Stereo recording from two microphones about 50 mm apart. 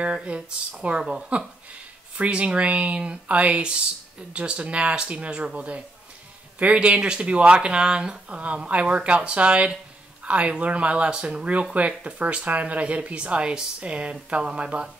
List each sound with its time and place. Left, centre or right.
0.0 s speech: right